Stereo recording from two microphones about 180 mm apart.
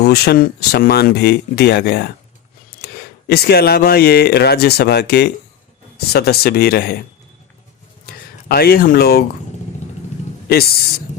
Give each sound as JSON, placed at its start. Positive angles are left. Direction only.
{"t": 0.0, "sound": "speech", "side_deg": 65}
{"t": 8.0, "sound": "speech", "side_deg": 60}